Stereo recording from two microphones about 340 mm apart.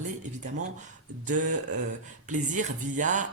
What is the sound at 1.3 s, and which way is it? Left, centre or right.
Speech, right.